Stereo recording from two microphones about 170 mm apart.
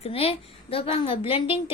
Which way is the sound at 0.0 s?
35° left (ahead or behind).